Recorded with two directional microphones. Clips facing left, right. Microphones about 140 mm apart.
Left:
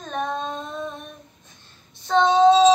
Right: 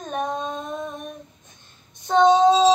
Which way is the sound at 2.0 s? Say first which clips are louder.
Even; 15° right (ahead or behind).